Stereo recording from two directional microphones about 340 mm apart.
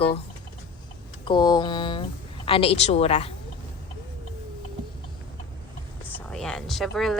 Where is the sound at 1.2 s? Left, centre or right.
Centre.